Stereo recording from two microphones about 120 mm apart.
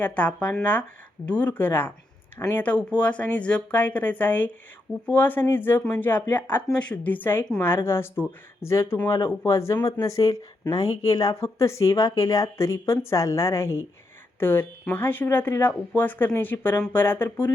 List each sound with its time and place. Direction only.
0.0 s speech: 10° left (ahead or behind)